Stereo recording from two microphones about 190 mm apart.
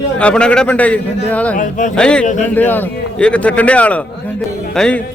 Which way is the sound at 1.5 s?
45° left (ahead or behind).